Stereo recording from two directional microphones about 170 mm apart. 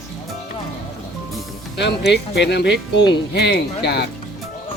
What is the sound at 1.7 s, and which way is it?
Speech, 90° left.